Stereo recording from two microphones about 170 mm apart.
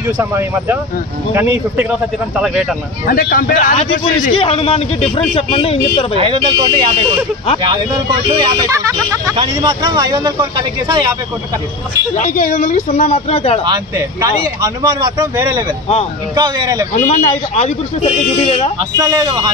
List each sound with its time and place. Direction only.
0.0 s speech: 15° right (ahead or behind)
3.1 s a man's voice: 55° left (ahead or behind)
4.3 s a man's voice: 35° left (ahead or behind)
6.1 s speech: 30° right (ahead or behind)
8.4 s speech: 20° right (ahead or behind)
12.2 s speech: 50° left (ahead or behind)
13.1 s a man's voice: 35° left (ahead or behind)
13.7 s speech: 20° right (ahead or behind)
16.3 s speech: 25° right (ahead or behind)
16.9 s a man's voice: 45° left (ahead or behind)
18.9 s speech: 20° right (ahead or behind)